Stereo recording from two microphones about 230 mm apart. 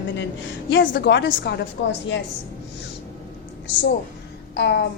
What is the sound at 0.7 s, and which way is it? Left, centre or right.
Speech, left.